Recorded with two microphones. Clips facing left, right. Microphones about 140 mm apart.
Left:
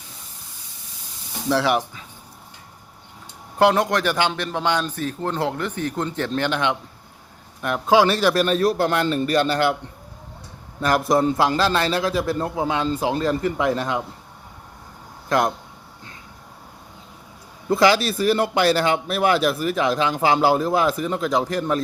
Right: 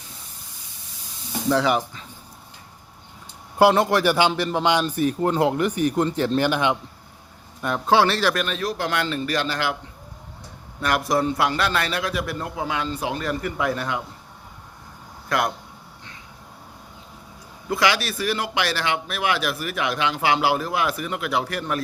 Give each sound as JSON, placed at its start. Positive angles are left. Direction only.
{"t": 1.5, "sound": "speech", "side_deg": 5}
{"t": 3.6, "sound": "a man's voice", "side_deg": -5}
{"t": 7.6, "sound": "a man's voice", "side_deg": 5}
{"t": 8.3, "sound": "speech", "side_deg": 35}
{"t": 10.8, "sound": "a man's voice", "side_deg": 30}
{"t": 15.3, "sound": "a man's voice", "side_deg": 25}
{"t": 17.7, "sound": "a man's voice", "side_deg": 30}